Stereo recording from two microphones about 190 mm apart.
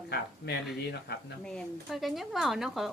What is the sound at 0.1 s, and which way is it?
Speech, 60° left (ahead or behind).